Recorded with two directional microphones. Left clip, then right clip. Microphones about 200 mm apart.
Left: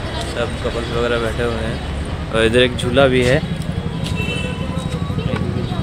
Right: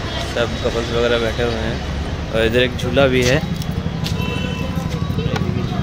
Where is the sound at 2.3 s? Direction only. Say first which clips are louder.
Left 2 dB; 25° left (ahead or behind).